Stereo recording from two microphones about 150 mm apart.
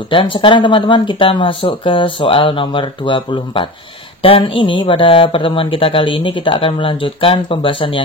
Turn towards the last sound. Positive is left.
turn(degrees=35)  # may be behind; listen again after turning